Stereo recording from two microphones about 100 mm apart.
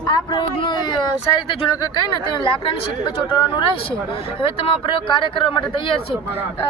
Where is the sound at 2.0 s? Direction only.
55° left (ahead or behind).